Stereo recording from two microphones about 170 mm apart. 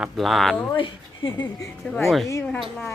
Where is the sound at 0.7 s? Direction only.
30° left (ahead or behind).